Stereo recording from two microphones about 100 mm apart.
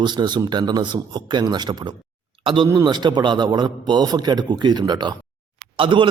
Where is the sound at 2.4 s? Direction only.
55° right (ahead or behind).